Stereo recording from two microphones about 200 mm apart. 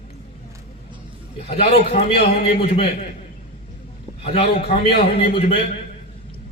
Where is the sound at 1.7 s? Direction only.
30° left (ahead or behind).